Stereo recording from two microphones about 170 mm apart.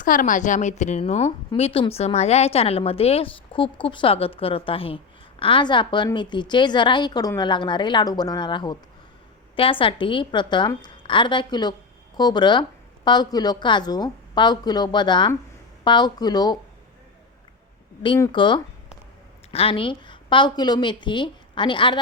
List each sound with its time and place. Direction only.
0.0 s a woman's voice: 55° left (ahead or behind); by 16.6 s 25° left (ahead or behind)
18.3 s a woman's voice: 25° left (ahead or behind)